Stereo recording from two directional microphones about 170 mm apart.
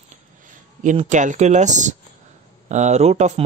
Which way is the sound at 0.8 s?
45° right (ahead or behind).